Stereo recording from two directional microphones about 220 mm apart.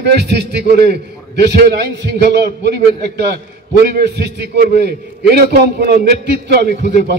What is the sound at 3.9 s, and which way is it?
A man's voice, 45° right (ahead or behind).